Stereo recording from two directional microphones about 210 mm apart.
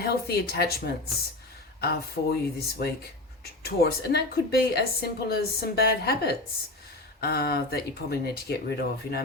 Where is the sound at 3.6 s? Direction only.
50° left (ahead or behind).